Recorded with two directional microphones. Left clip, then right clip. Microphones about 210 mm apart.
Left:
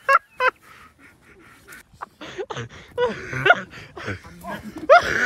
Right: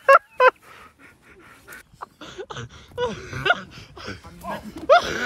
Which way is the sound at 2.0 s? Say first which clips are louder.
Left 4 dB; 15° right (ahead or behind).